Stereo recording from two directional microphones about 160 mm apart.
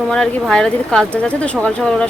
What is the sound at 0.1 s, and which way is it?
Speech, 5° left (ahead or behind).